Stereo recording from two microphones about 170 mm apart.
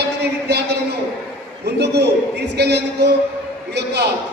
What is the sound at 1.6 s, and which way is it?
A man's voice, 75° right (ahead or behind).